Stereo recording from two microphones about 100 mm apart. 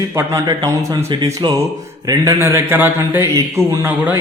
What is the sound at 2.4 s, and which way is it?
A man's voice, 25° right (ahead or behind).